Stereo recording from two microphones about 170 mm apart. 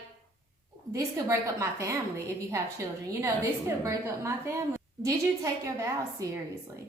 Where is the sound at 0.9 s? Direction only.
20° right (ahead or behind).